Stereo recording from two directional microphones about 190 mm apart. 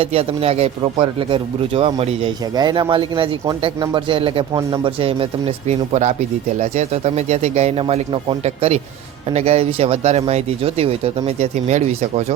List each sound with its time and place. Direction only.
0.0 s speech: 30° right (ahead or behind)